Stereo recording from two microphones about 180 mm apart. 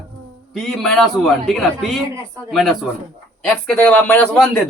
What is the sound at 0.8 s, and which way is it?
A man's voice, 5° left (ahead or behind).